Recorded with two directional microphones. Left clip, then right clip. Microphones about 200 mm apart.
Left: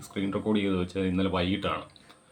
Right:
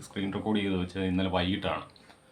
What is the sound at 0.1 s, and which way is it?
Speech, centre (ahead or behind).